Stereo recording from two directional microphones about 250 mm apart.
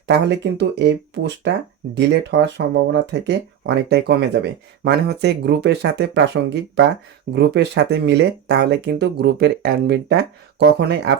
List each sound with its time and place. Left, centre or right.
0.3 s speech: right